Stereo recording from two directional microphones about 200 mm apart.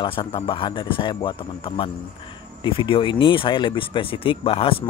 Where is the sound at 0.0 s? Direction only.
25° left (ahead or behind).